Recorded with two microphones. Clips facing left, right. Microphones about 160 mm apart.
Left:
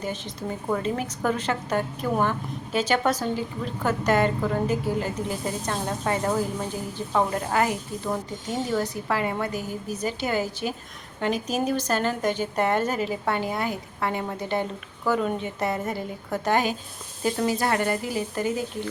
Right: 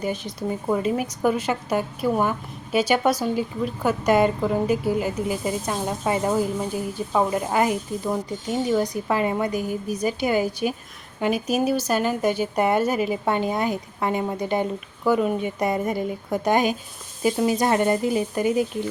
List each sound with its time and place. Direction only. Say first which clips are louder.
0.0 s a woman's voice: right 4 dB; 10° right (ahead or behind)